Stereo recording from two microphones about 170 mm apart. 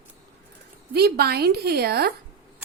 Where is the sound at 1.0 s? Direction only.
70° right (ahead or behind).